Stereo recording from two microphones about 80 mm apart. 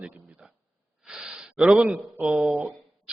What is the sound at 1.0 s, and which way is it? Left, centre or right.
Sigh, centre.